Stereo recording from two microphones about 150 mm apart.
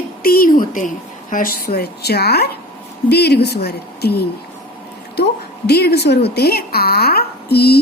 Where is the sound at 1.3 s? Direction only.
75° left (ahead or behind); by 4.3 s 90° left.